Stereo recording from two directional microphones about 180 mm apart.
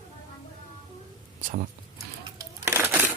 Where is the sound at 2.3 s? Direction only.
15° right (ahead or behind).